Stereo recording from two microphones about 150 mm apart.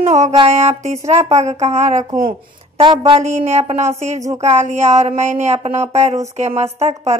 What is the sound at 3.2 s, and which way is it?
Speech, 50° right (ahead or behind).